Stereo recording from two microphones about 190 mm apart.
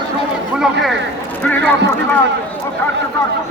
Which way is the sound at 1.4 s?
10° left (ahead or behind).